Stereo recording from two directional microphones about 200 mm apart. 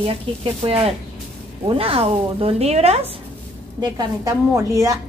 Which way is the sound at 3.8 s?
20° right (ahead or behind).